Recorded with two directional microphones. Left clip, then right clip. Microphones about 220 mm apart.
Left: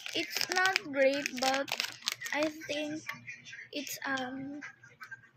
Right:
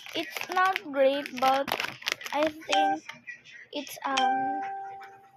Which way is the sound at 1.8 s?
30° right (ahead or behind).